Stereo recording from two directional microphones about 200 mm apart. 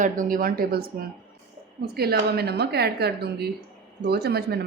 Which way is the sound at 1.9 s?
50° right (ahead or behind).